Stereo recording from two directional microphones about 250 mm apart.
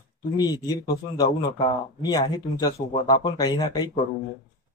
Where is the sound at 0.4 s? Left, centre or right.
Centre.